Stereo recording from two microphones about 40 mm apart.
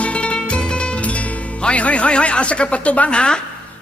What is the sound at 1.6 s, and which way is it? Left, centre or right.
A woman's voice, left.